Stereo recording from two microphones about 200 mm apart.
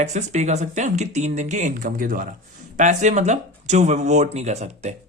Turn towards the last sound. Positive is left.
turn(degrees=-35)  # may be behind; listen again after turning